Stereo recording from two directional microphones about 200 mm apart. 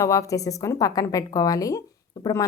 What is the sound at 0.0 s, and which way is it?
Speech, 15° left (ahead or behind).